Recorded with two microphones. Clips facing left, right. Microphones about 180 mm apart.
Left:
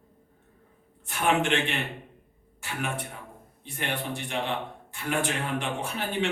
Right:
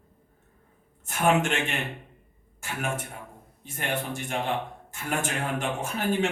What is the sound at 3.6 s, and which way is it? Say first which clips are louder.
A man's voice: right 1 dB; 45° right (ahead or behind).